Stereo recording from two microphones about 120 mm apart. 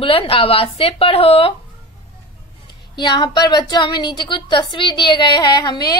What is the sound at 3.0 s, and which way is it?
A woman's voice, 35° left (ahead or behind).